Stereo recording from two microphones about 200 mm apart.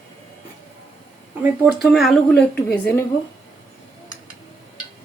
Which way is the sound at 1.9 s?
Centre (ahead or behind).